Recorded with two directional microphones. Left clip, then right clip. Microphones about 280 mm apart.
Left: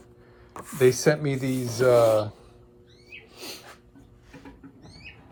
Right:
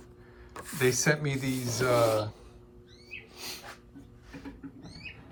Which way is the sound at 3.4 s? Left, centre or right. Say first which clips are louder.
Left 3 dB; centre.